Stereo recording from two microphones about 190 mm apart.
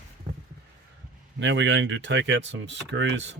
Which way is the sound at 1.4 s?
75° right (ahead or behind).